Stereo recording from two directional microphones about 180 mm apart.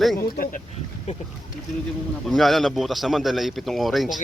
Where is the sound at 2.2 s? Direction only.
Centre (ahead or behind).